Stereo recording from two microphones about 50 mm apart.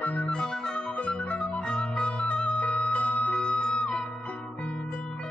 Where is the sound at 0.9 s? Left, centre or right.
Left.